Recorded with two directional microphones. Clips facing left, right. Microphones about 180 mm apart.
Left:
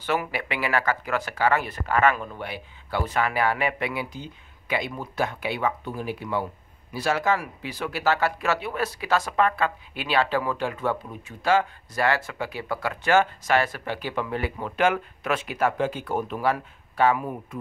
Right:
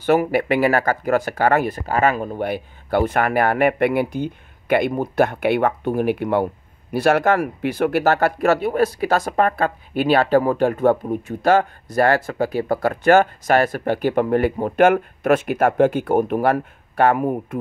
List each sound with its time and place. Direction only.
0.0 s speech: 50° right (ahead or behind)